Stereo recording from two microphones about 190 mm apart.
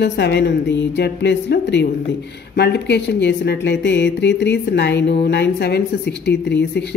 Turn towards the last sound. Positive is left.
turn(degrees=65)  # may be behind; listen again after turning